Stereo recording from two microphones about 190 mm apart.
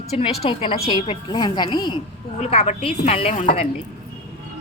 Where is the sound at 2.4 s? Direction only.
35° left (ahead or behind).